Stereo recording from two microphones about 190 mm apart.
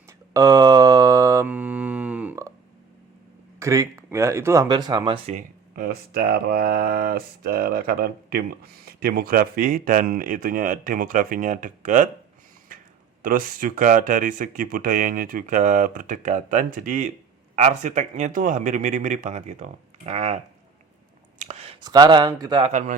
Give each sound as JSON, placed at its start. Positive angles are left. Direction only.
{"t": 0.3, "sound": "mantra", "side_deg": -20}
{"t": 3.6, "sound": "speech", "side_deg": -15}
{"t": 5.3, "sound": "speech", "side_deg": -45}
{"t": 13.2, "sound": "speech", "side_deg": -45}
{"t": 22.7, "sound": "speech", "side_deg": -40}